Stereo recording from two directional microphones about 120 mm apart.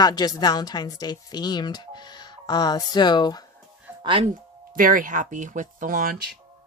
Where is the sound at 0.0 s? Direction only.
35° left (ahead or behind).